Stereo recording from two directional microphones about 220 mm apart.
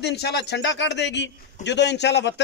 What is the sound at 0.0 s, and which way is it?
A man's voice, 50° left (ahead or behind).